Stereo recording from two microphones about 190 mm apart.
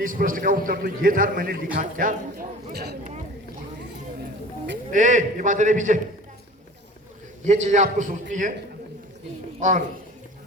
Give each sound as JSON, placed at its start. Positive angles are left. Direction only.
{"t": 0.0, "sound": "a man's voice", "side_deg": -45}
{"t": 2.7, "sound": "speech", "side_deg": -55}
{"t": 4.9, "sound": "a man's voice", "side_deg": -40}
{"t": 7.4, "sound": "a man's voice", "side_deg": -40}
{"t": 9.6, "sound": "speech", "side_deg": -40}